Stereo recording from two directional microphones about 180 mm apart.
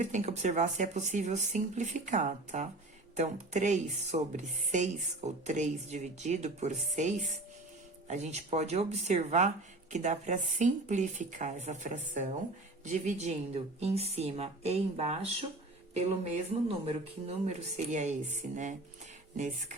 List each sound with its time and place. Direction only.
0.0 s speech: 40° right (ahead or behind)
16.6 s speech: 35° right (ahead or behind)